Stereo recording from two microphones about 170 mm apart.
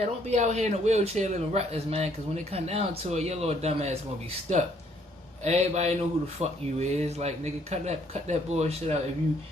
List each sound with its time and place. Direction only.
0.0 s speech: 40° right (ahead or behind)
5.4 s speech: 40° right (ahead or behind)